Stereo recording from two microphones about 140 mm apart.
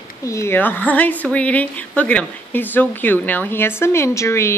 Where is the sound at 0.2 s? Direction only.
20° left (ahead or behind).